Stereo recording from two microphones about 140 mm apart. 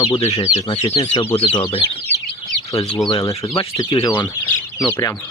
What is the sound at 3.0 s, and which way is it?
Speech, 35° left (ahead or behind).